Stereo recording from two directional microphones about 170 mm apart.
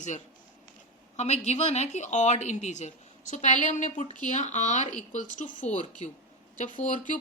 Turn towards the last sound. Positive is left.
turn(degrees=50)  # may be behind; listen again after turning